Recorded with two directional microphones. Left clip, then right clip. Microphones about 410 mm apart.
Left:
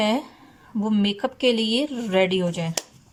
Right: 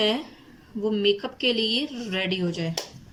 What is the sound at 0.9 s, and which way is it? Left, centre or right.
Speech, centre.